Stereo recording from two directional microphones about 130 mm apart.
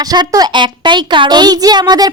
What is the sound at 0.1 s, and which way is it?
A child's voice, 30° right (ahead or behind).